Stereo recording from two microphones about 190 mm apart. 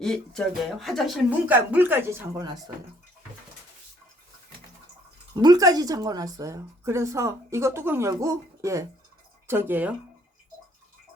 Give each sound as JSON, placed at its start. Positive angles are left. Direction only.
{"t": 0.0, "sound": "a woman's voice", "side_deg": 0}
{"t": 5.3, "sound": "a woman's voice", "side_deg": -20}